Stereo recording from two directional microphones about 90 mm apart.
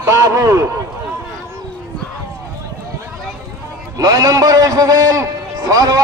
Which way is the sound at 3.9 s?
40° right (ahead or behind).